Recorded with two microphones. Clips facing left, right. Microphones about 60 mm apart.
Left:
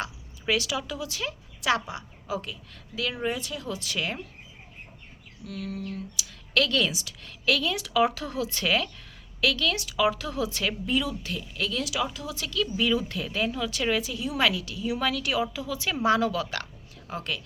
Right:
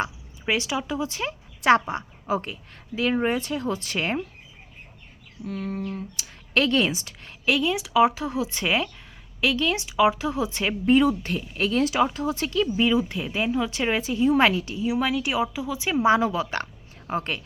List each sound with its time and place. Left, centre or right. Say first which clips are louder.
0.0 s speech: right 4 dB; right
5.5 s speech: right 4 dB; right
10.8 s speech: right 13 dB; right
14.8 s speech: right 3 dB; centre; by 17.4 s right